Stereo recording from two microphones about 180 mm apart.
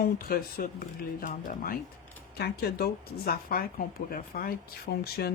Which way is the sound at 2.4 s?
60° left (ahead or behind).